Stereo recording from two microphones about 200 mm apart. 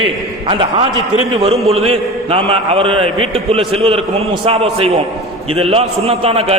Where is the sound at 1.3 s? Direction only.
30° right (ahead or behind).